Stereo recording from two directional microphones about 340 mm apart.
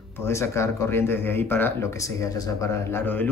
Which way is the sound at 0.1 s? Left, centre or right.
Centre.